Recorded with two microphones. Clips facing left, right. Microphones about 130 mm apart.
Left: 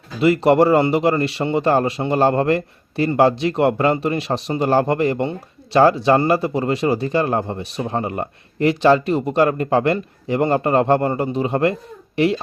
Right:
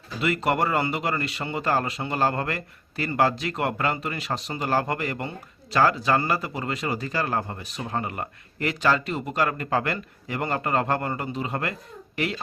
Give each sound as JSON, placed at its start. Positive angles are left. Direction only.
{"t": 0.2, "sound": "speech", "side_deg": 30}